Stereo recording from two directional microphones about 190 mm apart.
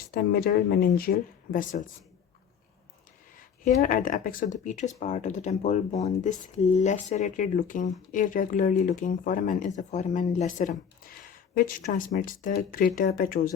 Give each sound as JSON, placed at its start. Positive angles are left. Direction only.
{"t": 0.1, "sound": "speech", "side_deg": 50}
{"t": 3.3, "sound": "speech", "side_deg": 45}